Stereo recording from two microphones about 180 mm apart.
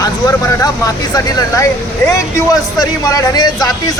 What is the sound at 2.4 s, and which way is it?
Speech, 20° left (ahead or behind).